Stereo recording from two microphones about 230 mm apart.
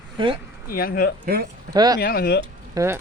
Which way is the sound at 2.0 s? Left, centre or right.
Left.